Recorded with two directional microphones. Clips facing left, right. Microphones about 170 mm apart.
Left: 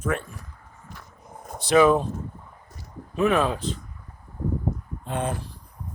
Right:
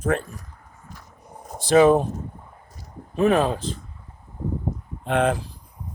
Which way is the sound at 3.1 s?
35° right (ahead or behind).